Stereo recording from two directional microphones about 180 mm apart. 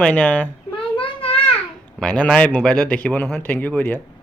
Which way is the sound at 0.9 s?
30° left (ahead or behind).